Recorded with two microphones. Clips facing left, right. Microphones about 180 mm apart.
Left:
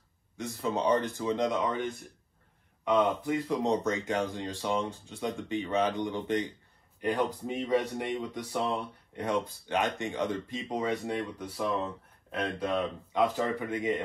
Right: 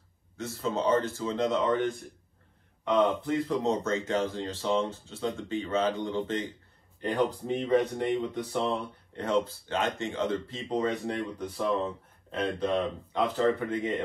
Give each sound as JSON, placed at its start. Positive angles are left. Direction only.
{"t": 0.4, "sound": "speech", "side_deg": 15}
{"t": 2.8, "sound": "speech", "side_deg": 10}